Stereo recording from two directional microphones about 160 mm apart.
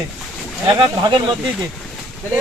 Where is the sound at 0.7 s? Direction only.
30° right (ahead or behind).